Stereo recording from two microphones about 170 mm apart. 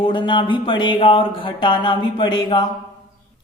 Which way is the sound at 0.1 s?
30° left (ahead or behind).